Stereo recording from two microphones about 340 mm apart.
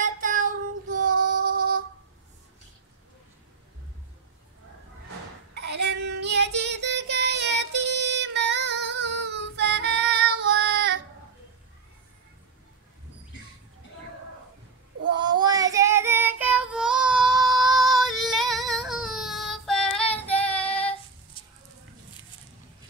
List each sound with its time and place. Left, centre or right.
0.0 s child singing: right
1.2 s music: right
5.5 s child singing: right
15.1 s child singing: centre
21.4 s a sound: centre